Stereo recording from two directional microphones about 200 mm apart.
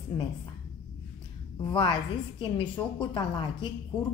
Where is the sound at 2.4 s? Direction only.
25° left (ahead or behind).